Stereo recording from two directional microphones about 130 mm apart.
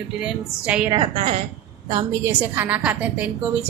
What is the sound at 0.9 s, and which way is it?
Speech, 45° right (ahead or behind).